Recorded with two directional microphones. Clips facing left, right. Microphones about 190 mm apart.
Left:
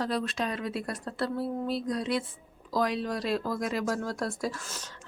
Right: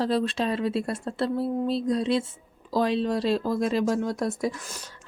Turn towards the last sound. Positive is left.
turn(degrees=-20)  # may be behind; listen again after turning